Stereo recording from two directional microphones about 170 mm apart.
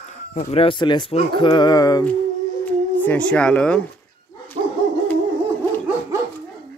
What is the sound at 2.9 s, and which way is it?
Speech, 10° left (ahead or behind).